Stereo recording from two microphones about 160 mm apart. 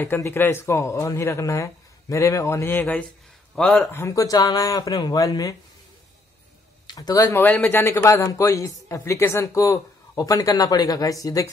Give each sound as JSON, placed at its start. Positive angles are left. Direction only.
{"t": 0.0, "sound": "speech", "side_deg": 15}
{"t": 3.9, "sound": "speech", "side_deg": 20}
{"t": 6.9, "sound": "speech", "side_deg": 25}
{"t": 7.4, "sound": "speech", "side_deg": 10}